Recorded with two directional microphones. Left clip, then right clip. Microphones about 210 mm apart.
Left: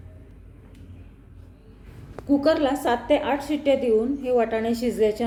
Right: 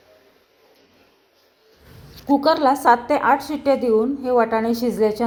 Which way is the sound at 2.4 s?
55° right (ahead or behind).